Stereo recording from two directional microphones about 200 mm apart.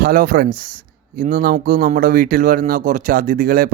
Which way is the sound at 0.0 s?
45° right (ahead or behind).